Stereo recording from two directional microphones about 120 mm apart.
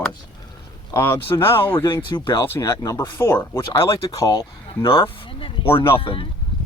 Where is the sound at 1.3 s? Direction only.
30° left (ahead or behind).